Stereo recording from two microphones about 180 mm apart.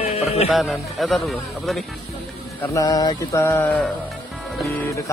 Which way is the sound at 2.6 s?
20° left (ahead or behind).